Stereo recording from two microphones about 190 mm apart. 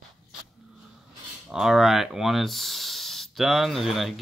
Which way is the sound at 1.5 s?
Centre (ahead or behind).